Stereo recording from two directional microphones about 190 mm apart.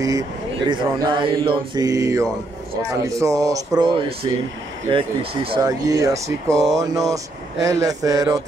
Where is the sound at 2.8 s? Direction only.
15° right (ahead or behind).